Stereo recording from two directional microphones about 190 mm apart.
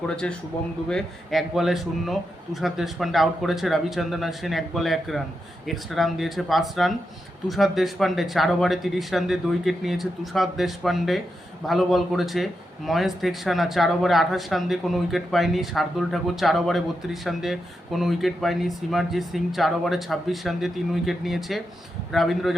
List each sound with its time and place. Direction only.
0.2 s speech: 5° left (ahead or behind)